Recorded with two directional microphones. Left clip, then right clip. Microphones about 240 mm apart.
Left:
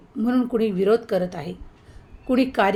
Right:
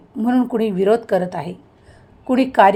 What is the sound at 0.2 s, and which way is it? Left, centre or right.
A woman's voice, centre.